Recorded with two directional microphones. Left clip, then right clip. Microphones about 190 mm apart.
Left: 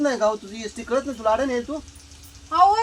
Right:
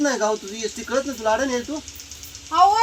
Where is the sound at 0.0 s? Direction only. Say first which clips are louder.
Even; 15° left (ahead or behind).